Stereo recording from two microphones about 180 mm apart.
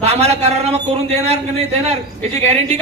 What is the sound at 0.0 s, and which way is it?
A man's voice, 35° right (ahead or behind).